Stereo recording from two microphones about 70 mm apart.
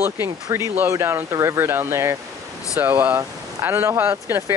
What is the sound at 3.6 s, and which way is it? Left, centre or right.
Speech, right.